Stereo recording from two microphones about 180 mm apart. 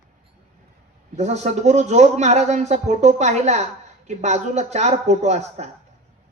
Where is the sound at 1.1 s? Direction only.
40° right (ahead or behind).